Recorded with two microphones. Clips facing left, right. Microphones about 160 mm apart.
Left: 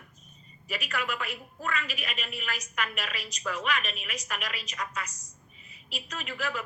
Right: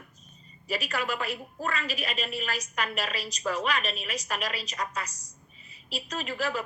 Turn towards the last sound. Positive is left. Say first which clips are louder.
# right 4 dB
turn(degrees=-35)  # may be behind; listen again after turning